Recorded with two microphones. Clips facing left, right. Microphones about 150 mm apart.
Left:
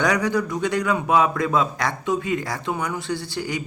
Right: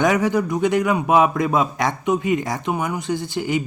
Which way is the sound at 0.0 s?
20° right (ahead or behind).